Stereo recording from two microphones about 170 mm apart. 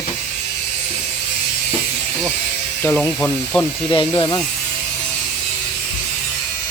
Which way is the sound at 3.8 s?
30° left (ahead or behind).